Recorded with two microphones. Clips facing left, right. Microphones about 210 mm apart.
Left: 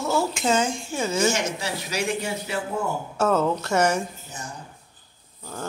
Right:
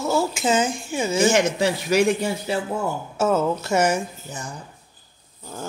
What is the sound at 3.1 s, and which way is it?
Speech, 5° right (ahead or behind).